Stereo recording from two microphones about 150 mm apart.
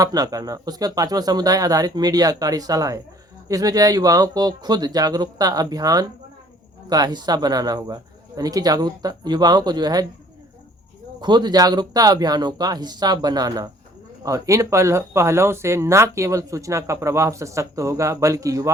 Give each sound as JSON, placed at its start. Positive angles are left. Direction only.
{"t": 0.0, "sound": "speech", "side_deg": -25}
{"t": 11.2, "sound": "speech", "side_deg": -30}